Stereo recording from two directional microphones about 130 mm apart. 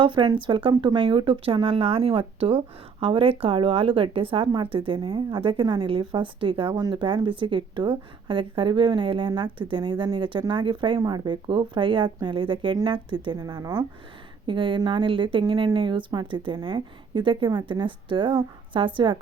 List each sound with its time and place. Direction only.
0.0 s speech: 40° right (ahead or behind)
14.4 s speech: 40° right (ahead or behind)